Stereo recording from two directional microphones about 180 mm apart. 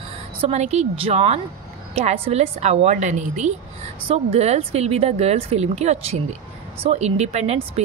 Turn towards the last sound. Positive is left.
turn(degrees=-35)  # may be behind; listen again after turning